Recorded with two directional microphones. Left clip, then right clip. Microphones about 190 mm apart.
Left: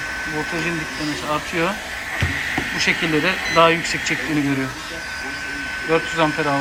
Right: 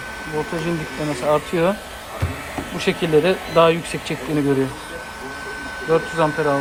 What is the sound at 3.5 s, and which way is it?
Speech, 15° right (ahead or behind).